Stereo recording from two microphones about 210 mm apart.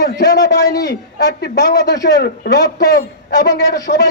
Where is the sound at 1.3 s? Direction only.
55° left (ahead or behind).